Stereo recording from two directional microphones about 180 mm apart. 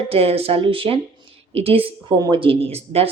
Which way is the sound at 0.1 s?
35° right (ahead or behind).